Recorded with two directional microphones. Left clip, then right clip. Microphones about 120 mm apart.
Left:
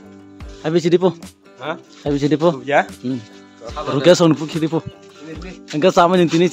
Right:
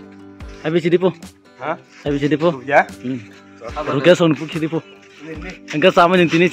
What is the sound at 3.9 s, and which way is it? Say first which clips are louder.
Speech: left 1 dB; 20° left (ahead or behind).